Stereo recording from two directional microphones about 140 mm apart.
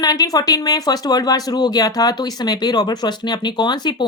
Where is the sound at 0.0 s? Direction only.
25° left (ahead or behind).